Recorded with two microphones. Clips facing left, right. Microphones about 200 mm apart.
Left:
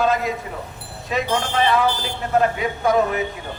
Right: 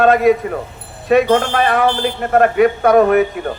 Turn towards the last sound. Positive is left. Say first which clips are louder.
# right 8 dB
turn(degrees=-60)  # may be behind; listen again after turning